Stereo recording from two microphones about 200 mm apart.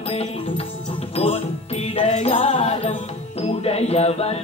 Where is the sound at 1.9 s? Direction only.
30° left (ahead or behind).